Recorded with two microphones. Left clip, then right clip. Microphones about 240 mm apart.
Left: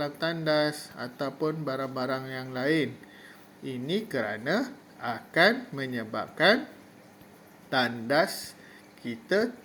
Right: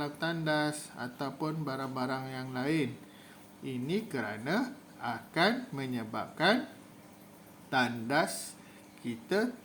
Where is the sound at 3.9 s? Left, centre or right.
Right.